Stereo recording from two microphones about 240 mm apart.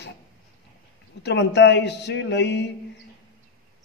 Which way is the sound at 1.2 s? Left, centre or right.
Left.